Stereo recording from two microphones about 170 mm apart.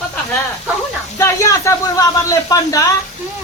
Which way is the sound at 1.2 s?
20° left (ahead or behind).